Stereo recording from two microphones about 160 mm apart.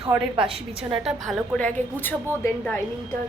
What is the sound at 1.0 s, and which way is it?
A woman's voice, centre (ahead or behind).